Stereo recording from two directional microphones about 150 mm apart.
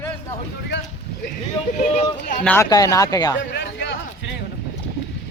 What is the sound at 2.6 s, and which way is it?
Speech, 25° left (ahead or behind).